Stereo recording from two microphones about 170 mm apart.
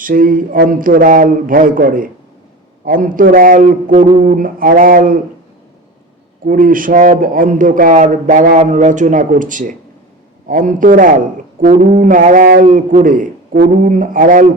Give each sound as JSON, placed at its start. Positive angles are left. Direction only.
{"t": 0.0, "sound": "speech", "side_deg": -55}
{"t": 6.4, "sound": "speech", "side_deg": -55}